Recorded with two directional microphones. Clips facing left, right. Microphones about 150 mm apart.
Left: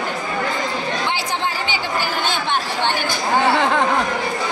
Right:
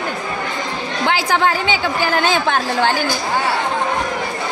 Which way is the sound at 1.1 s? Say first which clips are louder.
Right 6 dB; 90° right.